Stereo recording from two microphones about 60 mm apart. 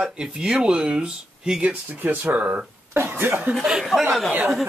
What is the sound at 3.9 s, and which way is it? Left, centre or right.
Speech, left.